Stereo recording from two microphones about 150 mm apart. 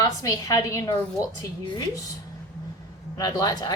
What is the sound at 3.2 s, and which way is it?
Speech, 25° left (ahead or behind).